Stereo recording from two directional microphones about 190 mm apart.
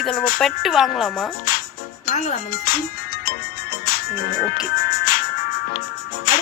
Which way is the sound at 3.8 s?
55° left (ahead or behind).